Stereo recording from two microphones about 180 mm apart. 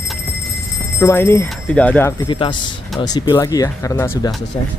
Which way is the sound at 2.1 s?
25° left (ahead or behind).